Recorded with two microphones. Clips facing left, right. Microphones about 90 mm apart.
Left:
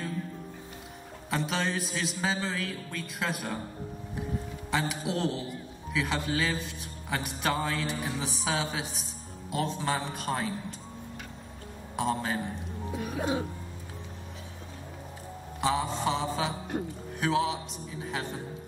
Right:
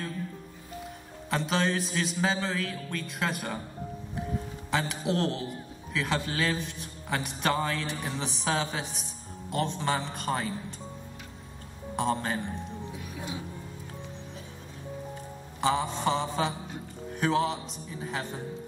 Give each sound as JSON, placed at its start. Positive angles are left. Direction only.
{"t": 1.3, "sound": "a man's voice", "side_deg": 0}
{"t": 4.6, "sound": "a man's voice", "side_deg": 0}
{"t": 11.9, "sound": "a man's voice", "side_deg": 0}
{"t": 12.9, "sound": "music", "side_deg": 55}
{"t": 15.6, "sound": "a man's voice", "side_deg": 0}